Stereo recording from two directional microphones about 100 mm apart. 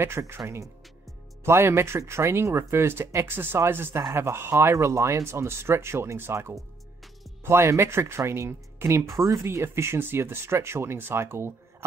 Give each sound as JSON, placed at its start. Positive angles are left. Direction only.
{"t": 0.0, "sound": "speech", "side_deg": -25}
{"t": 1.4, "sound": "speech", "side_deg": -25}